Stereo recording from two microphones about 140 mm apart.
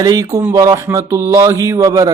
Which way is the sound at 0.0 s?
25° right (ahead or behind).